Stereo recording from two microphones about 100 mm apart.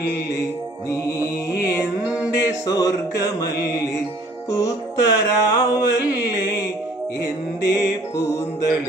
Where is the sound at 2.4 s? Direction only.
35° left (ahead or behind).